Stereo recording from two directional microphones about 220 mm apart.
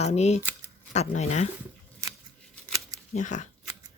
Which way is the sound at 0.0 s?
30° left (ahead or behind).